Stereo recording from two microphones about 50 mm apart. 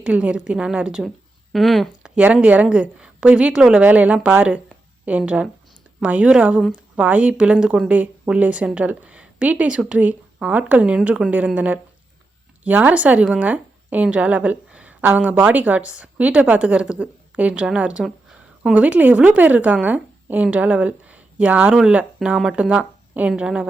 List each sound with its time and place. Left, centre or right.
0.0 s a woman's voice: right
1.5 s speech: centre
2.2 s a woman's voice: right
3.8 s a woman's voice: right
23.1 s a woman's voice: right